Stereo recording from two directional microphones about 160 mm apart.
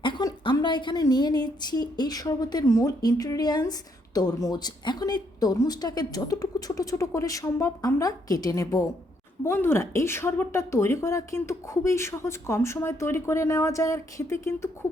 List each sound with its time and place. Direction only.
0.0 s a woman's voice: 30° left (ahead or behind)